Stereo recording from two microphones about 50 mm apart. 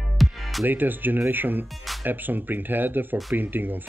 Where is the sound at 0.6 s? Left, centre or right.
Right.